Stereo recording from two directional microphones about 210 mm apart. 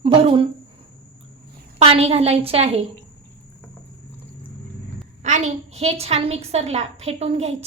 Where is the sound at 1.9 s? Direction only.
30° right (ahead or behind).